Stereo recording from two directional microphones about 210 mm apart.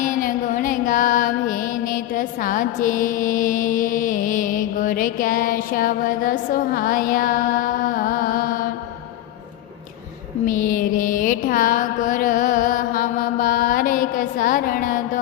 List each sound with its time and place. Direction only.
0.0 s music: 40° left (ahead or behind)
10.4 s music: 40° left (ahead or behind)